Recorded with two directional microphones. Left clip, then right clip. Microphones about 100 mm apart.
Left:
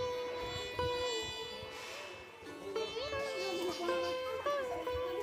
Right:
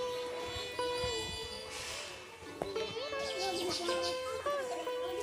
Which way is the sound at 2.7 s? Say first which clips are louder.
Left 1 dB; centre (ahead or behind).